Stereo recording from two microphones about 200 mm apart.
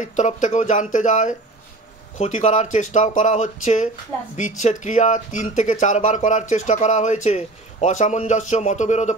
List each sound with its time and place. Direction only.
0.0 s a man's voice: 35° left (ahead or behind)